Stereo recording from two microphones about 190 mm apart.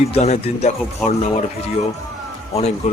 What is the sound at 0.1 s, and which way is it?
Speech, 35° left (ahead or behind).